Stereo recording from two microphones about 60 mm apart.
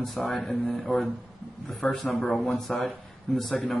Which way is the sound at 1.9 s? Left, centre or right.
Centre.